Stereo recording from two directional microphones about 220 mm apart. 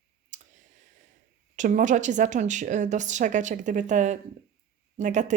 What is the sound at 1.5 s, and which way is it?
Speech, 35° right (ahead or behind).